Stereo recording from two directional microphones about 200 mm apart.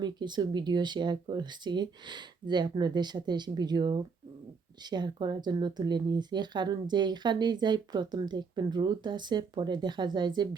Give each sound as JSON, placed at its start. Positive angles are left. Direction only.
{"t": 0.0, "sound": "speech", "side_deg": -20}